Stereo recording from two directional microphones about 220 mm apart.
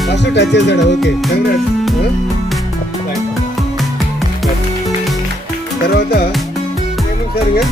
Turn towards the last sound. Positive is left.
turn(degrees=45)  # may be behind; listen again after turning